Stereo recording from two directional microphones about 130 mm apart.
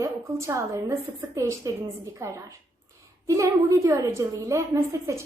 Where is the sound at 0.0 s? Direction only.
25° right (ahead or behind).